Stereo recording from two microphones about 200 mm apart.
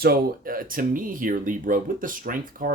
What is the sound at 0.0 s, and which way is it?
Speech, 50° right (ahead or behind).